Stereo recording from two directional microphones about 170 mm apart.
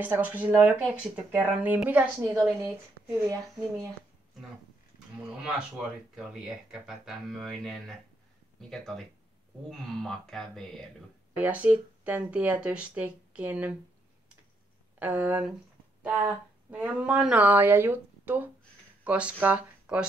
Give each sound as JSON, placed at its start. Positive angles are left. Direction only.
{"t": 0.0, "sound": "speech", "side_deg": -10}
{"t": 2.6, "sound": "speech", "side_deg": -20}
{"t": 5.1, "sound": "speech", "side_deg": -5}
{"t": 11.3, "sound": "speech", "side_deg": -10}
{"t": 15.0, "sound": "speech", "side_deg": -10}